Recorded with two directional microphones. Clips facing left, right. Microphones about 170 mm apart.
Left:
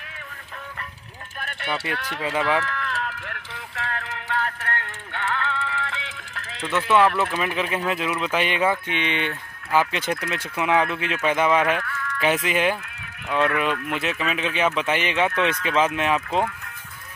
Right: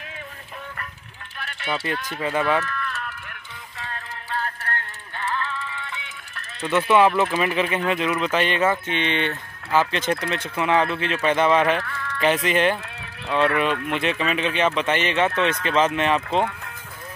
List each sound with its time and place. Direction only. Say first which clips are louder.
1.4 s speech: right 1 dB; 55° left (ahead or behind); by 2.3 s 75° left (ahead or behind)
2.6 s a sound: left 2 dB; 90° left
6.7 s speech: right 2 dB; centre (ahead or behind)
11.8 s a sound: even; 30° right (ahead or behind)
12.4 s speech: right 2 dB; 10° left (ahead or behind)
13.3 s speech: right 1 dB; 30° right (ahead or behind)
13.9 s speech: right 3 dB; 5° left (ahead or behind)